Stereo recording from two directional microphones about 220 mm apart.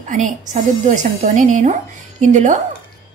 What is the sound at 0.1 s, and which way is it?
A woman's voice, 35° right (ahead or behind).